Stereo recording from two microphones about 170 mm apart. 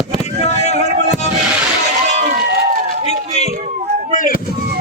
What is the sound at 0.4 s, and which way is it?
Boat, 40° left (ahead or behind).